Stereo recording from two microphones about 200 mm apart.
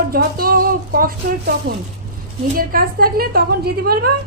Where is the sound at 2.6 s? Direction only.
45° right (ahead or behind).